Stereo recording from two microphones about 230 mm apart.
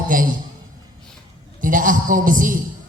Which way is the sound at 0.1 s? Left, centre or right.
Right.